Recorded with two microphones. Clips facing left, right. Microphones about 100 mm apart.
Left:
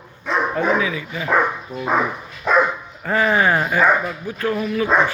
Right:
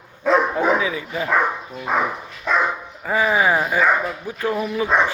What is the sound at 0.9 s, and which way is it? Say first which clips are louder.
Speech: right 1 dB; 30° right (ahead or behind).